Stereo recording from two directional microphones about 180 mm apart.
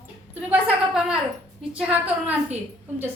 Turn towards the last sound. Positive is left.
turn(degrees=-10)  # may be behind; listen again after turning